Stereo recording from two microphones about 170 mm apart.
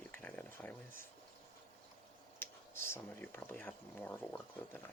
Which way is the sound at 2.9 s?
15° left (ahead or behind).